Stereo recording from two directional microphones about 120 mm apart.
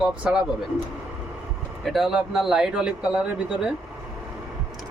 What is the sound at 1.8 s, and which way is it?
A man's voice, centre (ahead or behind).